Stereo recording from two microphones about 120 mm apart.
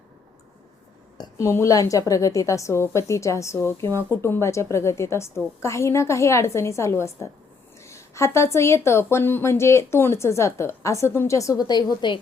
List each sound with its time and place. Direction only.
1.2 s a woman's voice: 25° left (ahead or behind)